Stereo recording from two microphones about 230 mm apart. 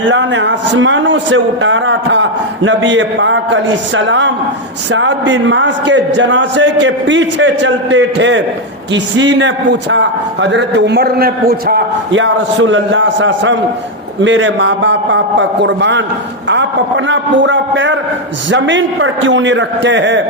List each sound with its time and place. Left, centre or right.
0.0 s a man's voice: right
17.1 s a man's voice: right